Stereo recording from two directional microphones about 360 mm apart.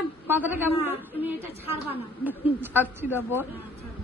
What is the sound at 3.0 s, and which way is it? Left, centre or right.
Speech, centre.